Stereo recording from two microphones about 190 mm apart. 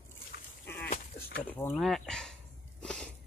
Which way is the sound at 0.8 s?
45° left (ahead or behind).